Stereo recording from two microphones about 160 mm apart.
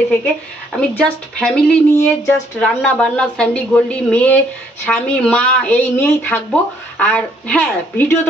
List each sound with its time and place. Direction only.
0.7 s a woman's voice: 5° left (ahead or behind)